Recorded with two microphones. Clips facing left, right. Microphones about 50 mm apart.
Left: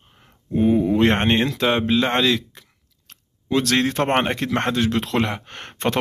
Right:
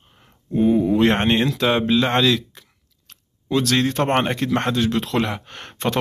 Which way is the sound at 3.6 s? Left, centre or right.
Left.